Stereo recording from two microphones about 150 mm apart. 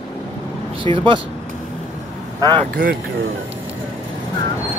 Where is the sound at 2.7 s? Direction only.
75° right (ahead or behind).